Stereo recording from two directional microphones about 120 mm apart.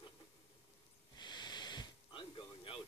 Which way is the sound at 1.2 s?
35° left (ahead or behind).